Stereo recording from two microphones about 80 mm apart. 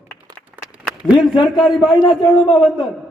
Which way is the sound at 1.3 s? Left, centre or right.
Left.